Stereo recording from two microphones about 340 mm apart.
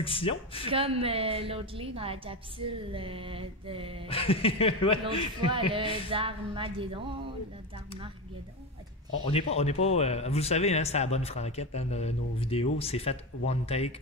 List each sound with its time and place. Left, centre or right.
0.0 s speech: centre
0.7 s a woman's voice: centre
4.1 s speech: centre
5.5 s a woman's voice: centre
9.3 s speech: centre